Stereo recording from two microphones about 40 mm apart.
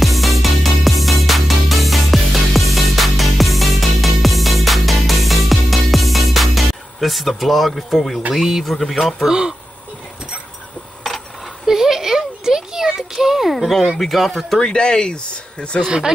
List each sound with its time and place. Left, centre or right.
0.0 s music: centre
8.4 s speech: centre
9.2 s speech: centre
11.6 s a sound: centre
14.6 s speech: left